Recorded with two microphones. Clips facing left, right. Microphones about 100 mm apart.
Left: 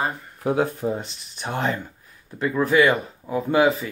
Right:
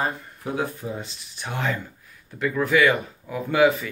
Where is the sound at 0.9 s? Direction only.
30° left (ahead or behind).